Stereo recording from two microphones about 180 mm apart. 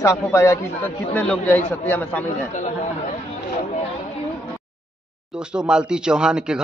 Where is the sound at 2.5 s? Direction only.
45° left (ahead or behind).